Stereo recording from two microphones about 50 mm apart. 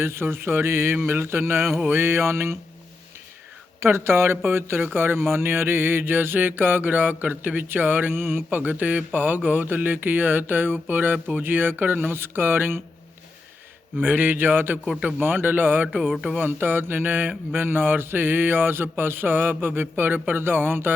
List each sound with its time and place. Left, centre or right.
0.0 s mantra: right
2.3 s speech: right
3.8 s speech: right
4.9 s mantra: right
14.0 s mantra: right